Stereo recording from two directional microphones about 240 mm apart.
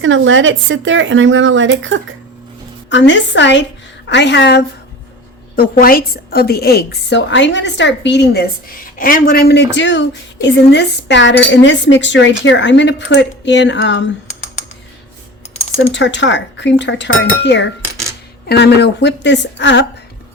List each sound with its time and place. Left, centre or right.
0.0 s speech: right
2.9 s a woman's voice: left
15.9 s a woman's voice: left